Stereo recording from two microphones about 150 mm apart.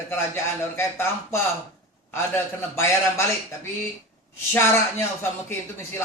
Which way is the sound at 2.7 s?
20° left (ahead or behind).